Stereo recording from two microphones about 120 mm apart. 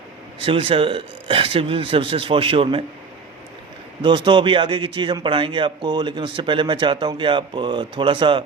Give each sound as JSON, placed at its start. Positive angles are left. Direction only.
{"t": 0.4, "sound": "speech", "side_deg": -50}
{"t": 4.0, "sound": "speech", "side_deg": -40}